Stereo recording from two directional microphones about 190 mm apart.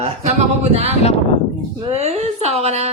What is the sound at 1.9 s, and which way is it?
Speech, 35° right (ahead or behind).